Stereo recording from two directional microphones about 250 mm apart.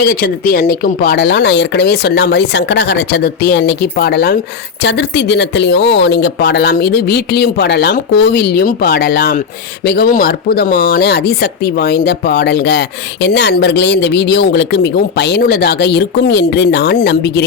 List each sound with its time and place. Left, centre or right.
0.0 s speech: left